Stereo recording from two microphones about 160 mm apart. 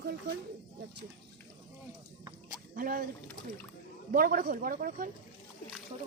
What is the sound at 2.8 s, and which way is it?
Speech, 60° right (ahead or behind).